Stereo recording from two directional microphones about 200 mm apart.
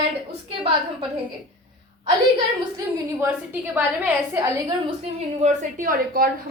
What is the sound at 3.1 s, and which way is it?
Speech, 10° right (ahead or behind).